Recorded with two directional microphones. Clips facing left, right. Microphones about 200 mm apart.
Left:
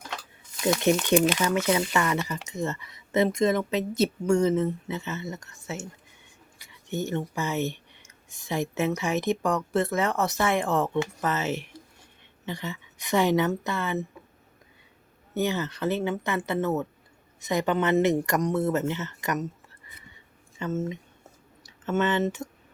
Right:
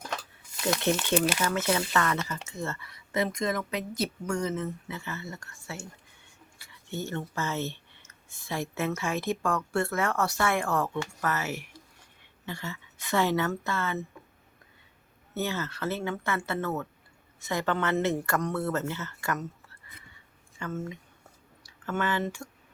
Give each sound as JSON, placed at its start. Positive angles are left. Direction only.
{"t": 0.9, "sound": "speech", "side_deg": 15}
{"t": 15.4, "sound": "speech", "side_deg": 15}
{"t": 20.6, "sound": "speech", "side_deg": 25}